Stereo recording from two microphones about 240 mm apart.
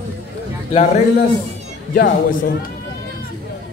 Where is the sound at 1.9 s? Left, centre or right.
Left.